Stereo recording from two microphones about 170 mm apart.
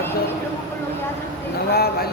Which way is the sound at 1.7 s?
65° left (ahead or behind).